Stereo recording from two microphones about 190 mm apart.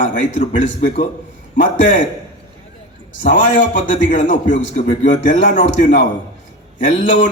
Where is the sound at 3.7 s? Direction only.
40° left (ahead or behind).